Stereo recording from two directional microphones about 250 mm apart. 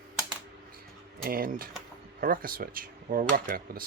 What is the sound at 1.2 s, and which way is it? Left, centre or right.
Speech, right.